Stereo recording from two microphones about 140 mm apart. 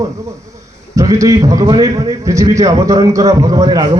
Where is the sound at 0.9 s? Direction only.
25° right (ahead or behind).